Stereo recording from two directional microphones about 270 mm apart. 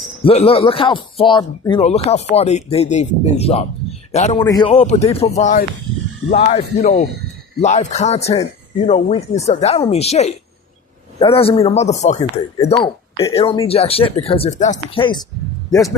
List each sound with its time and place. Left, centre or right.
0.2 s speech: left